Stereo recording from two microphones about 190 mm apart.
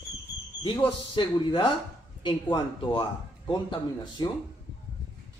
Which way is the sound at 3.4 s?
25° left (ahead or behind).